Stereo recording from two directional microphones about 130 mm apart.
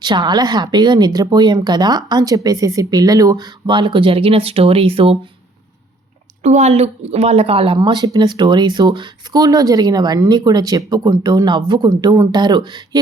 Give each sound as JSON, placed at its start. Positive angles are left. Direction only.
{"t": 0.0, "sound": "speech", "side_deg": -35}
{"t": 6.4, "sound": "speech", "side_deg": -60}